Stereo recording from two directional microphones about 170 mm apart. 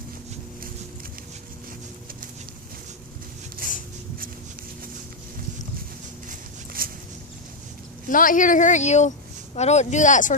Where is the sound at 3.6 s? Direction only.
55° right (ahead or behind).